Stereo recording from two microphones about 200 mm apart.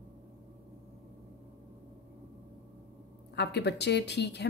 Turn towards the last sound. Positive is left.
turn(degrees=55)  # may be behind; listen again after turning